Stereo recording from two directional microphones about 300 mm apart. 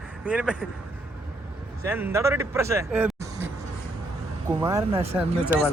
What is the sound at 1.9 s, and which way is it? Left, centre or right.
Speech, centre.